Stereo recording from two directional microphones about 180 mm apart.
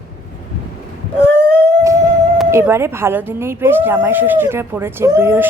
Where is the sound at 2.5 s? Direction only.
15° right (ahead or behind).